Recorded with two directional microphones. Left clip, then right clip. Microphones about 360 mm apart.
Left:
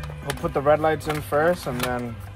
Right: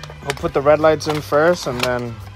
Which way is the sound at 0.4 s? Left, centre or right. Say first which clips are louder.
Right 6 dB; right.